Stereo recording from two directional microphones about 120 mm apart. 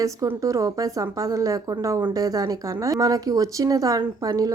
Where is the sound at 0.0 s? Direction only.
25° right (ahead or behind).